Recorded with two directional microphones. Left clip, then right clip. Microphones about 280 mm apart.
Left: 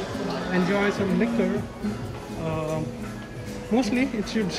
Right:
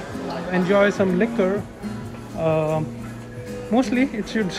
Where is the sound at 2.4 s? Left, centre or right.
Centre.